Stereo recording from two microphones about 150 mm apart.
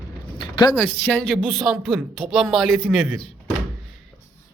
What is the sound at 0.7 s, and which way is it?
Speech, 10° left (ahead or behind).